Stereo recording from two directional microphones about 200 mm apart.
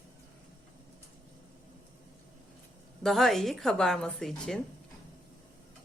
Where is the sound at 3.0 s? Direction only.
Centre (ahead or behind).